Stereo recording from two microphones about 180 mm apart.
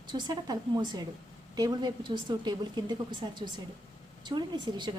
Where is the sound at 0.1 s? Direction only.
20° right (ahead or behind).